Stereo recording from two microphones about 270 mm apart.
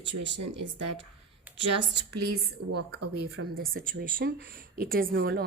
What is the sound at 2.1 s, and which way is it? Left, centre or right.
Speech, right.